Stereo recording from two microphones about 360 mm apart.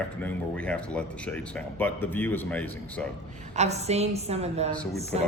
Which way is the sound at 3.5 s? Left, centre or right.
Centre.